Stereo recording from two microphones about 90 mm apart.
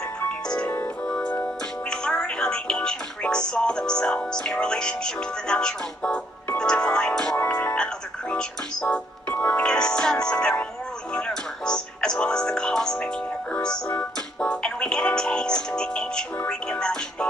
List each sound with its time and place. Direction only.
1.0 s music: 10° left (ahead or behind)